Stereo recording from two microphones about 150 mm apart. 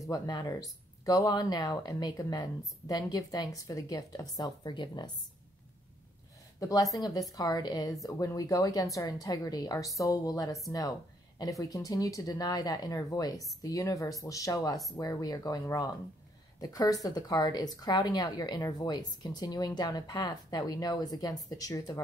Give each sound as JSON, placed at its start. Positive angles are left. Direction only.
{"t": 0.0, "sound": "a woman's voice", "side_deg": 25}
{"t": 6.6, "sound": "a woman's voice", "side_deg": 25}